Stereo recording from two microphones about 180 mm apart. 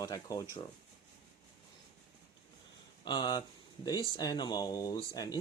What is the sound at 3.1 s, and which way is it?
Speech, 25° left (ahead or behind).